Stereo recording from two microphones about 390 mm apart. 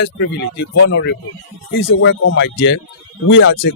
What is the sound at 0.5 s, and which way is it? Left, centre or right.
Speech, left.